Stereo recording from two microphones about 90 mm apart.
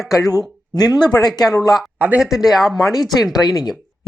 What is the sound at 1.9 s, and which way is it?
Speech, 20° right (ahead or behind).